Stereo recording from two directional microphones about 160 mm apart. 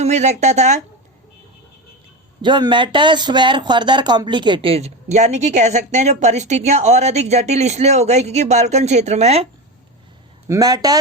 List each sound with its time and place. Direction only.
0.0 s speech: 45° right (ahead or behind)
2.4 s speech: 30° right (ahead or behind)
10.5 s speech: 25° right (ahead or behind)